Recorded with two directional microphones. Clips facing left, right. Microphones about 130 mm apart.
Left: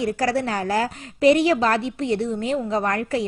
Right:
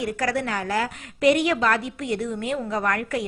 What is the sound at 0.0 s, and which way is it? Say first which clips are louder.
A woman's voice: left 3 dB; 30° left (ahead or behind).